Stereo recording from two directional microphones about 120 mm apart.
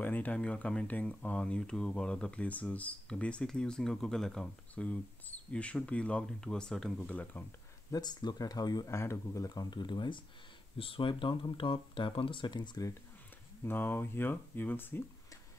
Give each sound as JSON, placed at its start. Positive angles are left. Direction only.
{"t": 0.0, "sound": "speech", "side_deg": 10}
{"t": 7.9, "sound": "speech", "side_deg": 35}
{"t": 13.7, "sound": "speech", "side_deg": 15}